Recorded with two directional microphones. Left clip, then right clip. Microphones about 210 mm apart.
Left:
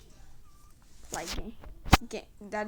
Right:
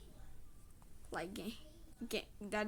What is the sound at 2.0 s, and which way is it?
Speech, 5° right (ahead or behind).